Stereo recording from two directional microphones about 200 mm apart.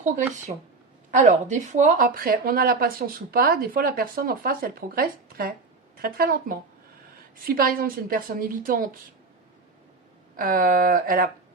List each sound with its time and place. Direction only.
1.1 s speech: 40° right (ahead or behind)
10.3 s speech: 45° right (ahead or behind)